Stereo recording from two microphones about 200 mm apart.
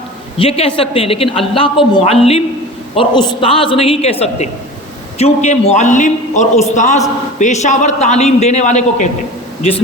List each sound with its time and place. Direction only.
0.3 s a woman's voice: 30° left (ahead or behind)